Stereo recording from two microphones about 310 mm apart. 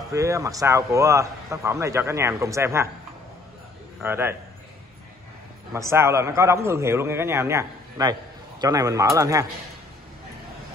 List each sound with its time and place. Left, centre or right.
0.1 s a man's voice: centre
4.0 s a man's voice: centre
5.7 s a man's voice: centre